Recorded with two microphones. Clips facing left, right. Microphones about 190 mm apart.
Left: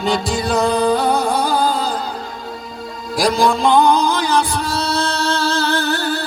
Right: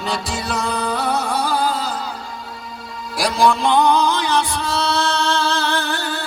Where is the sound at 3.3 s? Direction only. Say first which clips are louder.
Left 1 dB; 35° left (ahead or behind).